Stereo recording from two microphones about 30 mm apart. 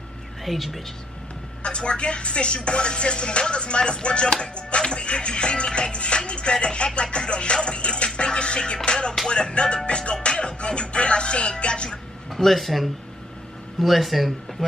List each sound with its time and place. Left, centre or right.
0.5 s speech: centre
1.6 s music: left
12.4 s speech: centre